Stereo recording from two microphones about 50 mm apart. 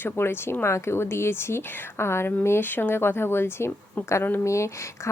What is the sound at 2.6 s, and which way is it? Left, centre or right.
Speech, left.